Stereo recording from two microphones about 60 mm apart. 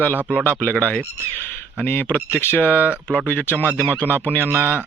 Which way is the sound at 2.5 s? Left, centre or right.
Right.